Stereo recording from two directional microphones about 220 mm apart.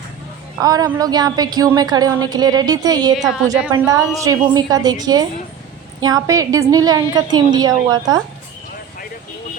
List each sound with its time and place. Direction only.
0.6 s a woman's voice: 15° right (ahead or behind)
3.2 s a woman's voice: centre (ahead or behind)
3.7 s a woman's voice: 15° right (ahead or behind)